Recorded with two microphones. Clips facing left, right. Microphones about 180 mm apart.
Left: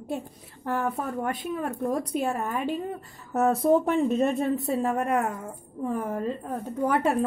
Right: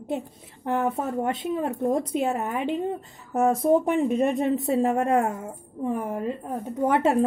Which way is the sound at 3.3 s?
10° right (ahead or behind).